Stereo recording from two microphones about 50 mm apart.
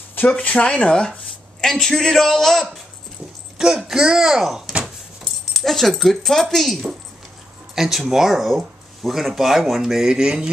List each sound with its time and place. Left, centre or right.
0.3 s a man's voice: left; by 2.7 s centre
3.5 s speech: centre